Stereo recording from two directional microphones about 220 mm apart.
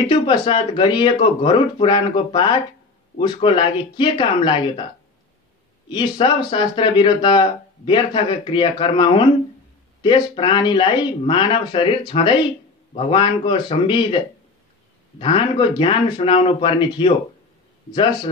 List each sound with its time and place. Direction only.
0.0 s speech: 20° left (ahead or behind)
5.9 s speech: 20° left (ahead or behind)